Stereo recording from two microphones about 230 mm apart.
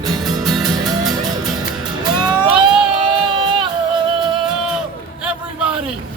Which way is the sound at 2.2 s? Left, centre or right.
Centre.